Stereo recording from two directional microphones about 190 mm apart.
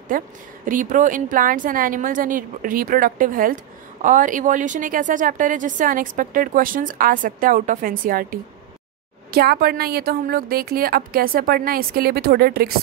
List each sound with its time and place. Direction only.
0.1 s a woman's voice: 45° right (ahead or behind)